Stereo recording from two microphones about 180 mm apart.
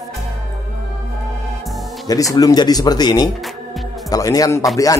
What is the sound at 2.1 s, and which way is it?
Speech, 20° left (ahead or behind).